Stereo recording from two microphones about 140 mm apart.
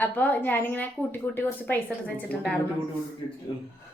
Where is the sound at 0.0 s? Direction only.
10° left (ahead or behind).